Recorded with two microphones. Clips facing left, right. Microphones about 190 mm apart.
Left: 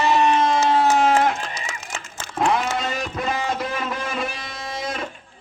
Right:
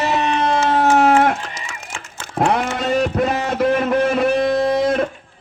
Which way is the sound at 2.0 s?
60° right (ahead or behind).